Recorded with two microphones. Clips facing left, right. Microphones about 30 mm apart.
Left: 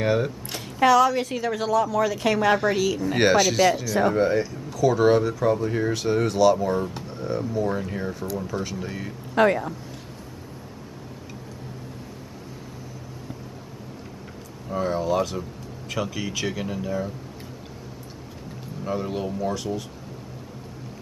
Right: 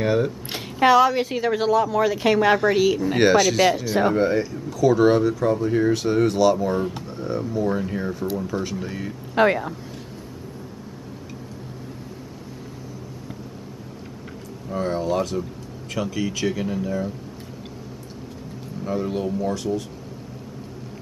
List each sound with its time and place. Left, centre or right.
0.0 s speech: centre
0.8 s a woman's voice: right
3.2 s speech: centre
9.3 s a woman's voice: centre
14.7 s speech: centre
18.9 s speech: centre